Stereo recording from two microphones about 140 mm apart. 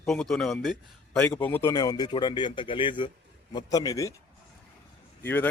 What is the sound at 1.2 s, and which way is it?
Speech, 15° left (ahead or behind).